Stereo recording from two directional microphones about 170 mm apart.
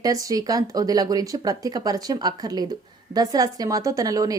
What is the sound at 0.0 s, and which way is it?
A woman's voice, 20° right (ahead or behind).